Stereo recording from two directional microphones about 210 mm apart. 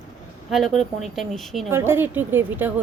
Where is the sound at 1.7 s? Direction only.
10° right (ahead or behind).